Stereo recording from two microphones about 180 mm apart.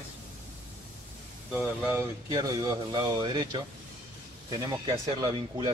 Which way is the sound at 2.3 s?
20° right (ahead or behind).